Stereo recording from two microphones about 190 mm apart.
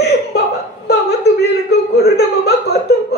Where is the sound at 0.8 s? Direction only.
60° left (ahead or behind).